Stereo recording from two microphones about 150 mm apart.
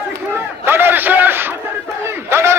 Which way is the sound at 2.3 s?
15° right (ahead or behind).